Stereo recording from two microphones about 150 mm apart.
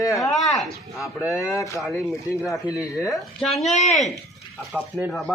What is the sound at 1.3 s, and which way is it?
Speech, 20° left (ahead or behind).